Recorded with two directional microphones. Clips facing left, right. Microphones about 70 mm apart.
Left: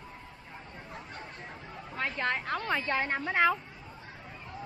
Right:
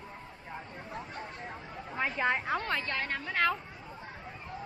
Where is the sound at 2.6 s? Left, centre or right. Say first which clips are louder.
Left 3 dB; centre.